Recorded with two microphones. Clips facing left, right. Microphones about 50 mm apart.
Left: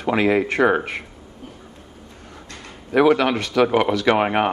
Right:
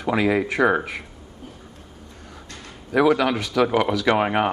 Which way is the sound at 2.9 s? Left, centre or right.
Left.